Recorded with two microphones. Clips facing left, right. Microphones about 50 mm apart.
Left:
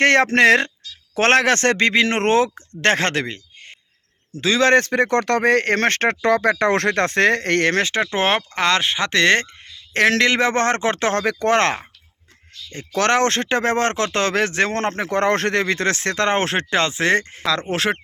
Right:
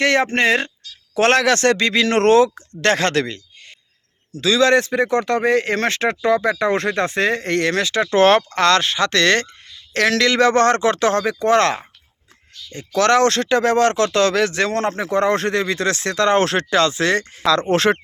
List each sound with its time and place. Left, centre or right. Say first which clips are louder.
0.0 s speech: left 2 dB; left
0.3 s speech: left 3 dB; left
1.1 s speech: right 1 dB; left
4.9 s speech: even; left
8.1 s speech: right 6 dB; centre; by 11.3 s left
11.3 s speech: even; left
17.4 s speech: right 5 dB; centre